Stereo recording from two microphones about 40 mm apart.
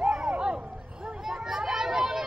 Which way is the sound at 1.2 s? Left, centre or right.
Centre.